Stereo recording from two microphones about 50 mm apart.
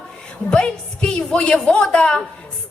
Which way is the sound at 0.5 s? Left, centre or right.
Centre.